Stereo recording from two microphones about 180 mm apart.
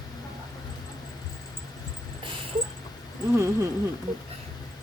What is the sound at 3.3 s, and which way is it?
Speech, 15° right (ahead or behind).